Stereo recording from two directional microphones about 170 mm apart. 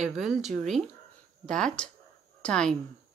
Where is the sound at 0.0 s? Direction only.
Centre (ahead or behind).